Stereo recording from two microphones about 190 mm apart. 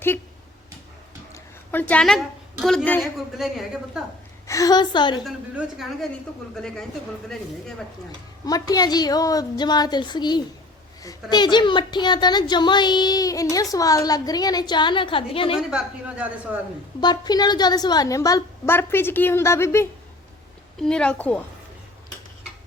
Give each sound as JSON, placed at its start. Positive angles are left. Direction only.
{"t": 1.3, "sound": "a sound", "side_deg": 10}
{"t": 3.4, "sound": "a woman's voice", "side_deg": 0}
{"t": 4.4, "sound": "a woman's voice", "side_deg": 15}
{"t": 5.2, "sound": "a woman's voice", "side_deg": 0}
{"t": 8.4, "sound": "a woman's voice", "side_deg": 20}
{"t": 15.5, "sound": "a woman's voice", "side_deg": -5}
{"t": 17.0, "sound": "a woman's voice", "side_deg": 20}